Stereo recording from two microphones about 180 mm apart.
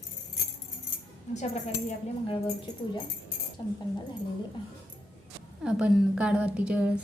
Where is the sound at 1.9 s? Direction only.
30° left (ahead or behind).